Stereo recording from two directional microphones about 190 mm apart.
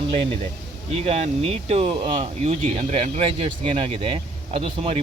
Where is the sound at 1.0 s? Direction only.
30° right (ahead or behind).